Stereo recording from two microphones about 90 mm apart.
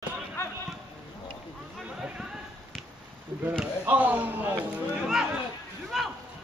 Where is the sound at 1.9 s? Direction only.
15° right (ahead or behind).